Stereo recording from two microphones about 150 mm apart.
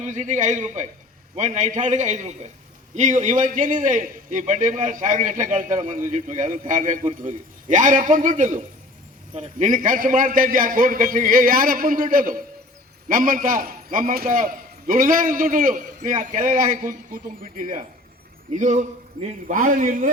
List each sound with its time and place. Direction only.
0.0 s a man's voice: 55° right (ahead or behind)